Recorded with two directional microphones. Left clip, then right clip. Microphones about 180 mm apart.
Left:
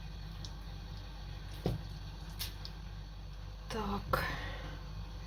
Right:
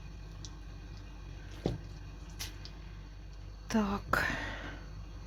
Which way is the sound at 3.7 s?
60° right (ahead or behind).